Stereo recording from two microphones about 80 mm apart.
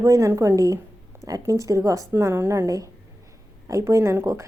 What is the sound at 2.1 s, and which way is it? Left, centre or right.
A woman's voice, right.